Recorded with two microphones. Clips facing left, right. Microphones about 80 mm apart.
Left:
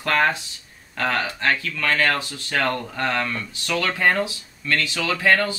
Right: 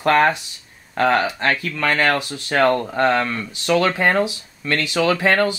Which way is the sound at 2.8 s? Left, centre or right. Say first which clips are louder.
Right 8 dB; right.